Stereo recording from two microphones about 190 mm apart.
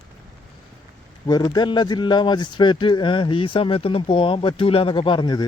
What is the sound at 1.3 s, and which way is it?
Speech, 20° left (ahead or behind).